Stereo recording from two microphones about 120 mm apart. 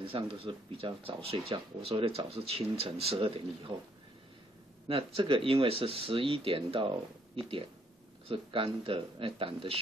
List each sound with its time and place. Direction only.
0.0 s speech: 50° right (ahead or behind)
4.8 s speech: 50° right (ahead or behind)
8.3 s speech: 50° right (ahead or behind)